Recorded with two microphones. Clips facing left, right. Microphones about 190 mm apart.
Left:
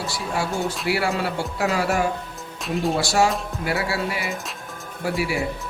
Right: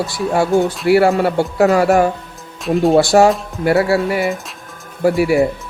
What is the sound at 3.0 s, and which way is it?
Music, 55° right (ahead or behind).